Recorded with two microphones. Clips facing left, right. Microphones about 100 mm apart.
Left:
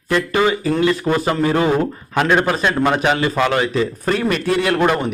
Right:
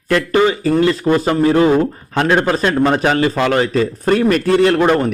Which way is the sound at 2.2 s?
35° right (ahead or behind).